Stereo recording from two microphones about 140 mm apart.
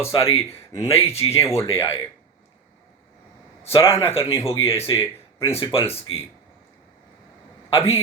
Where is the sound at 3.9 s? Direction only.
15° left (ahead or behind).